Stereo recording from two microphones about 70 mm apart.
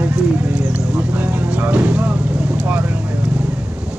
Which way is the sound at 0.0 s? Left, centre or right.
Right.